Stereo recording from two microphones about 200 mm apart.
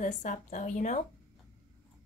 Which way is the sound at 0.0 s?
40° left (ahead or behind).